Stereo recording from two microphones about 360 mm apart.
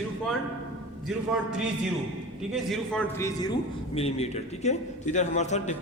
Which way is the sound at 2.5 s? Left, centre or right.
Centre.